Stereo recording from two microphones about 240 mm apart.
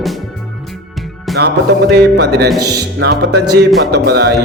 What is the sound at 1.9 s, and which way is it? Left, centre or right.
Music, right.